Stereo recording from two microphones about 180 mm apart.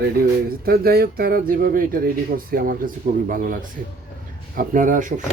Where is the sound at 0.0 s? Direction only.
55° right (ahead or behind).